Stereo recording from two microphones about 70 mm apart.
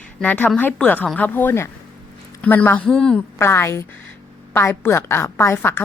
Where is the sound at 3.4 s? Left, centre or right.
Left.